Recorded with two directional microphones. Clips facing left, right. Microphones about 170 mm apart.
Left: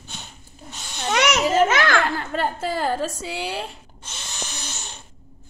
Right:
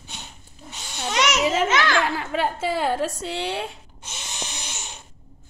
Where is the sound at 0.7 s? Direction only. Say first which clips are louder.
Even; 10° right (ahead or behind).